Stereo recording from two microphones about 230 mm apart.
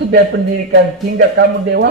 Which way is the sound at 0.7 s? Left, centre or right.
Right.